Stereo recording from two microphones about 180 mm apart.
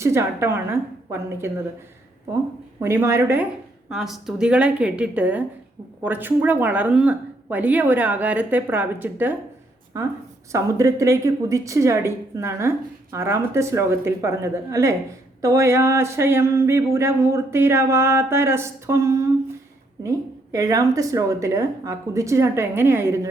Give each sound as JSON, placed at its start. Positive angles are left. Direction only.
{"t": 0.0, "sound": "a woman's voice", "side_deg": -15}
{"t": 2.8, "sound": "a woman's voice", "side_deg": -15}
{"t": 3.8, "sound": "a woman's voice", "side_deg": 0}
{"t": 10.5, "sound": "a woman's voice", "side_deg": -15}